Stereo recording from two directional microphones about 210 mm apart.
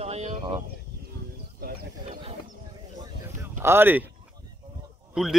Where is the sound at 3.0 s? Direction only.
15° right (ahead or behind).